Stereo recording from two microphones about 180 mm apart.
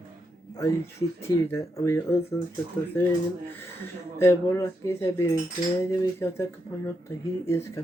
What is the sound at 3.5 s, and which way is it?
Speech, 15° left (ahead or behind).